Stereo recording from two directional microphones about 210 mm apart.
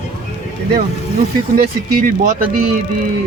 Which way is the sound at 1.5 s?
45° right (ahead or behind).